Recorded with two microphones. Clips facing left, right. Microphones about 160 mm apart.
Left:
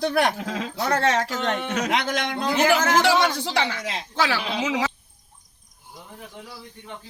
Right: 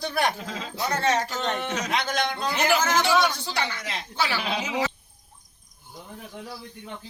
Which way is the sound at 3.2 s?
90° left.